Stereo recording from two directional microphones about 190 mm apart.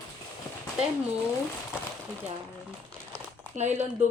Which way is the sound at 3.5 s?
40° right (ahead or behind).